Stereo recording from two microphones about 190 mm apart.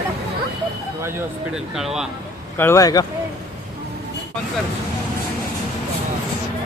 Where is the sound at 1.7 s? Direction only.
Centre (ahead or behind).